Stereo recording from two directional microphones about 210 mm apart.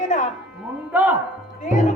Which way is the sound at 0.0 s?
35° left (ahead or behind).